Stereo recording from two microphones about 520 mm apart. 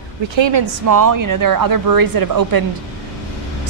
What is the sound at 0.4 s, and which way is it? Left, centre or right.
Speech, right.